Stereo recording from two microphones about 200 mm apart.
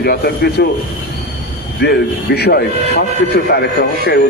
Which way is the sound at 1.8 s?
55° left (ahead or behind).